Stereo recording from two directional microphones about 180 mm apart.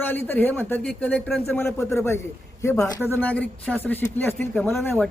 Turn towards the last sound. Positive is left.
turn(degrees=10)  # may be behind; listen again after turning